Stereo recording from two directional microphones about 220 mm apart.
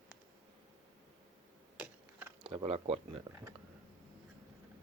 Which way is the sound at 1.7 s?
5° right (ahead or behind).